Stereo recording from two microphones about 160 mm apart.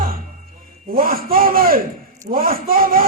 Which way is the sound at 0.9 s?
65° right (ahead or behind).